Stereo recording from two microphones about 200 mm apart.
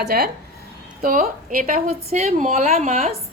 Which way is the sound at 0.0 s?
50° right (ahead or behind).